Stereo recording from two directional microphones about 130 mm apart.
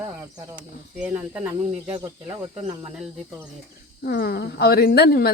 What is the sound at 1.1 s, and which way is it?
Speech, 20° right (ahead or behind).